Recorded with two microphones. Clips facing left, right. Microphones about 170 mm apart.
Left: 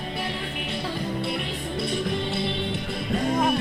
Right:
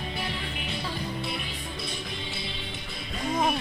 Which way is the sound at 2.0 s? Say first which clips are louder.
Left 10 dB; 60° left (ahead or behind).